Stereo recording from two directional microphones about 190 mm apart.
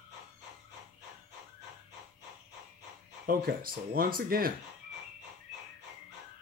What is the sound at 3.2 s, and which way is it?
Speech, 50° right (ahead or behind).